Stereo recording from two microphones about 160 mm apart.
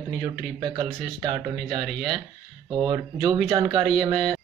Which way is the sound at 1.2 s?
30° right (ahead or behind).